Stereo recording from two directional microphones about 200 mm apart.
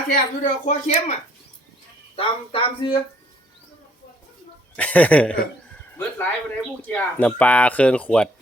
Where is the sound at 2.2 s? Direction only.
30° left (ahead or behind).